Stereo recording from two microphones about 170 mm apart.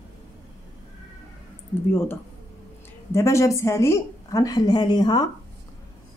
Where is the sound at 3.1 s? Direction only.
15° left (ahead or behind).